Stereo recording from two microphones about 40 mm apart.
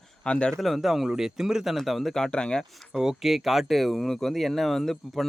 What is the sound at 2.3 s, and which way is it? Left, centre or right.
Speech, left.